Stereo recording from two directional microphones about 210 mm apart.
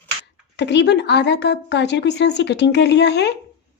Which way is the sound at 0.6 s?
55° left (ahead or behind).